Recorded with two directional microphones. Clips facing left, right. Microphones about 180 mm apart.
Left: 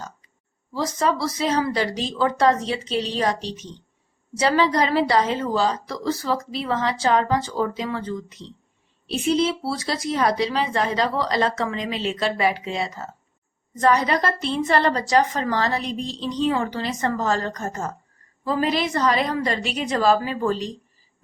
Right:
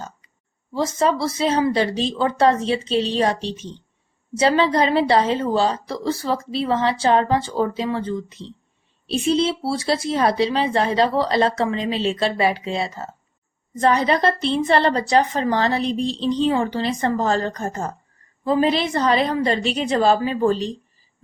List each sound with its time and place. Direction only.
0.7 s a woman's voice: 25° right (ahead or behind)